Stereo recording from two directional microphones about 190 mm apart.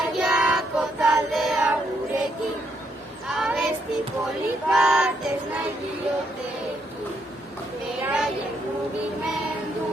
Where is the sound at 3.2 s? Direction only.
Centre (ahead or behind).